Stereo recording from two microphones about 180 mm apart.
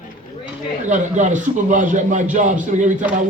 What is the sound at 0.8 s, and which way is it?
A man's voice, 40° right (ahead or behind).